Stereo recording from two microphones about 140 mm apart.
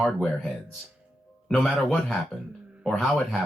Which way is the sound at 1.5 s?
5° left (ahead or behind).